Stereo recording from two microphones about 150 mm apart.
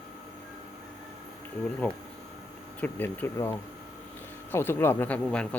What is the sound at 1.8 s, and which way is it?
Speech, 10° left (ahead or behind).